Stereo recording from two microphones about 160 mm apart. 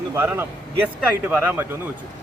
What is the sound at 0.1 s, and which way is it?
Speech, 15° right (ahead or behind).